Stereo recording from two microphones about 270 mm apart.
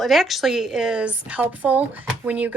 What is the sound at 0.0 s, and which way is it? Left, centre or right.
A woman's voice, centre.